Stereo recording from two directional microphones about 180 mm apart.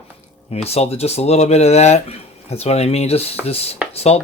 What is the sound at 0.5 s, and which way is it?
Speech, 35° left (ahead or behind).